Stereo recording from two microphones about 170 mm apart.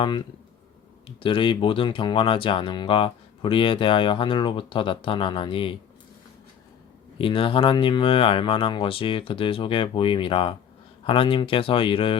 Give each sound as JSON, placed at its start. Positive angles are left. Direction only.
{"t": 0.0, "sound": "speech", "side_deg": 30}
{"t": 7.2, "sound": "speech", "side_deg": 30}